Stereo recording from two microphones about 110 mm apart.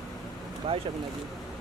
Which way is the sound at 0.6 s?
60° right (ahead or behind).